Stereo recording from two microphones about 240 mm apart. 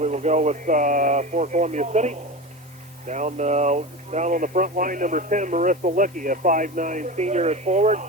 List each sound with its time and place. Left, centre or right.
0.0 s speech: right